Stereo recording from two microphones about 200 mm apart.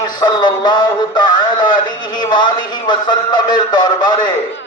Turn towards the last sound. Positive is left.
turn(degrees=20)  # may be behind; listen again after turning